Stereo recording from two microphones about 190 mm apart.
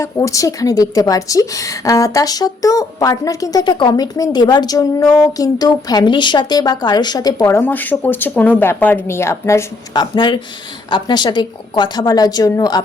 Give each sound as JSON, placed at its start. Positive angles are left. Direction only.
{"t": 0.0, "sound": "a woman's voice", "side_deg": 15}